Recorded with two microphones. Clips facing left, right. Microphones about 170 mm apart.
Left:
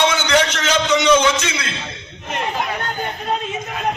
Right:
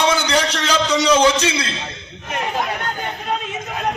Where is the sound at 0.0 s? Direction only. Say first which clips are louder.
Left 1 dB; 35° right (ahead or behind).